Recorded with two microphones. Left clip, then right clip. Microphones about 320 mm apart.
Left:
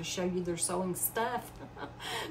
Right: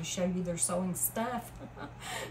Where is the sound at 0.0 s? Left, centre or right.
Centre.